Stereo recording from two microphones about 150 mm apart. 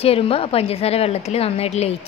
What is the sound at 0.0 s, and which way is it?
A woman's voice, 40° left (ahead or behind).